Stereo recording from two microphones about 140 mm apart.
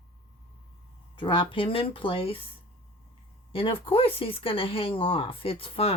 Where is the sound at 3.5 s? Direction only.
40° left (ahead or behind).